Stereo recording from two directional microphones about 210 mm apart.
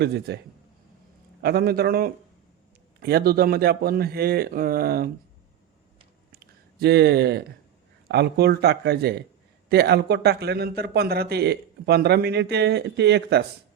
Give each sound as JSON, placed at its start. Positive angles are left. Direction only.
{"t": 0.0, "sound": "speech", "side_deg": -50}
{"t": 1.4, "sound": "speech", "side_deg": -50}
{"t": 6.7, "sound": "speech", "side_deg": -50}